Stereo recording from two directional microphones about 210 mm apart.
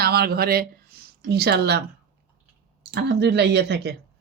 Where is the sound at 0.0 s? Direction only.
50° right (ahead or behind).